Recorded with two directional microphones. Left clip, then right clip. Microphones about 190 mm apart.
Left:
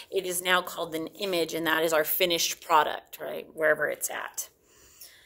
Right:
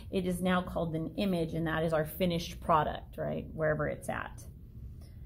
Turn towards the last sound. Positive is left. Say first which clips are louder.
# left 3 dB
turn(degrees=40)  # may be behind; listen again after turning